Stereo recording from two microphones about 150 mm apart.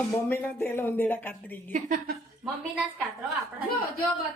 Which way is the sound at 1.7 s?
65° right (ahead or behind).